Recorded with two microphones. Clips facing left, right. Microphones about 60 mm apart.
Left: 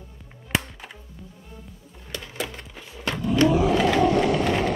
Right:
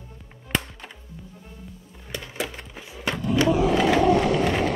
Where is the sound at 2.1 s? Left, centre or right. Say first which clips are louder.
Right 1 dB; centre.